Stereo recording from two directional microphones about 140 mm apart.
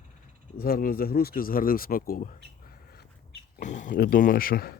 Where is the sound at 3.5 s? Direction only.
65° left (ahead or behind); by 4.7 s 90° left.